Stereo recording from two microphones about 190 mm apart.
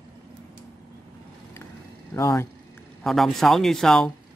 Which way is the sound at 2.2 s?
15° left (ahead or behind).